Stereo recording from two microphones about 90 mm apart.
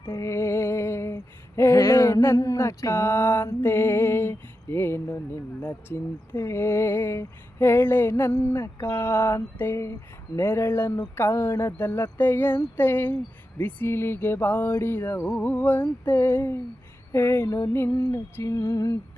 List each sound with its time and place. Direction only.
0.1 s female singing: 30° left (ahead or behind)
5.6 s speech: 25° left (ahead or behind)
18.1 s music: 35° left (ahead or behind)